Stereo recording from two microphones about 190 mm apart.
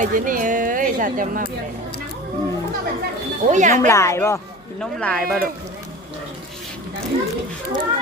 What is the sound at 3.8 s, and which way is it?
Speech, 15° left (ahead or behind).